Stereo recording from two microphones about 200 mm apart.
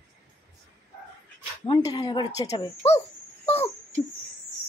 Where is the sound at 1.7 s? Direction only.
20° left (ahead or behind).